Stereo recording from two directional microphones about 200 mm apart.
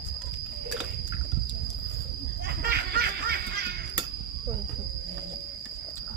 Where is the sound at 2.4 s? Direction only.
50° right (ahead or behind).